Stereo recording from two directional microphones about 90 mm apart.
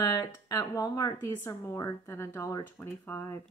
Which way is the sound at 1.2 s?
30° left (ahead or behind).